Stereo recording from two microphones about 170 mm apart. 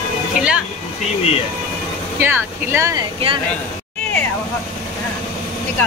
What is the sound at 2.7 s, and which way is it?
Speech, 20° right (ahead or behind).